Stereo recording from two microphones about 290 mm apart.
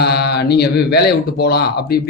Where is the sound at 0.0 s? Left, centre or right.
Left.